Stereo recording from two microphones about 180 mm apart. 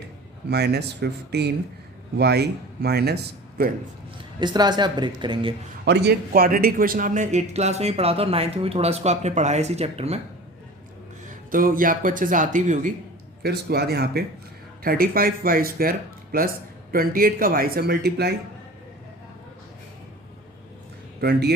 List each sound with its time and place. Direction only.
0.5 s speech: 65° right (ahead or behind)
4.4 s speech: 25° right (ahead or behind)
5.8 s a man's voice: 70° right (ahead or behind); by 10.2 s 35° right (ahead or behind)
11.5 s speech: 50° right (ahead or behind)
13.4 s speech: 65° right (ahead or behind)
21.2 s speech: 60° right (ahead or behind)